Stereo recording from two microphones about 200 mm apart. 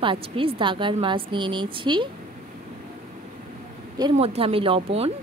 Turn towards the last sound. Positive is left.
turn(degrees=-30)  # may be behind; listen again after turning